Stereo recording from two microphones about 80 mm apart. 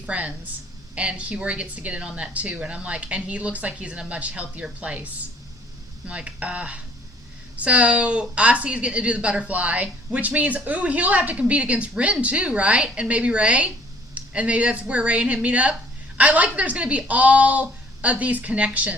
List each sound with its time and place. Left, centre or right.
0.0 s a woman's voice: centre
6.1 s a woman's voice: centre